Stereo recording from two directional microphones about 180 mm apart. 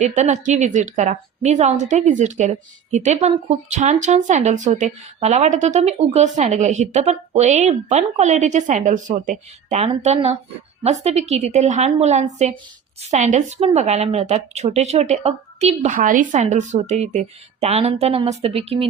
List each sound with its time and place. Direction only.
0.0 s a woman's voice: 40° right (ahead or behind)
16.0 s a woman's voice: 45° right (ahead or behind)